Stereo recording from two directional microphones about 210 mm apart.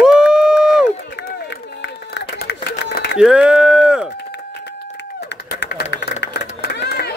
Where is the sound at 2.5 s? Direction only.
50° left (ahead or behind).